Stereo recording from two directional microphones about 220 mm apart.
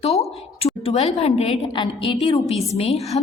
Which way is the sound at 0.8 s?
25° left (ahead or behind).